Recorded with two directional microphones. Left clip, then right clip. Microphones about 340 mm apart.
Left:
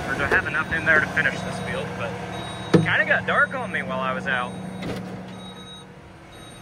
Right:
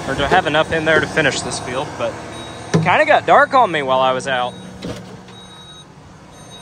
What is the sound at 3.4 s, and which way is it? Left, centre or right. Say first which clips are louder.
Speech: right 10 dB; right.